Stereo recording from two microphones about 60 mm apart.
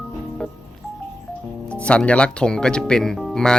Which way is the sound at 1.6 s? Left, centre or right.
Centre.